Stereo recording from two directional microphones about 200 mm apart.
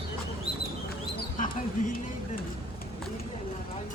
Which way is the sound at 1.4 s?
40° left (ahead or behind).